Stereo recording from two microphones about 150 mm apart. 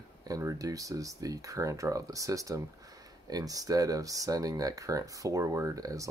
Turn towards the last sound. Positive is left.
turn(degrees=-20)  # may be behind; listen again after turning